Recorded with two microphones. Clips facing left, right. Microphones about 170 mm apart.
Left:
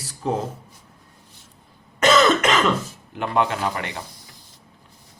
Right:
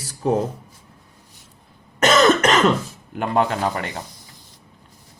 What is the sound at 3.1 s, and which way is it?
Speech, 40° right (ahead or behind).